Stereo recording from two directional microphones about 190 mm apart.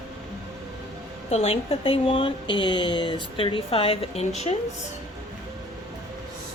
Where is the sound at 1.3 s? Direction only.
35° left (ahead or behind).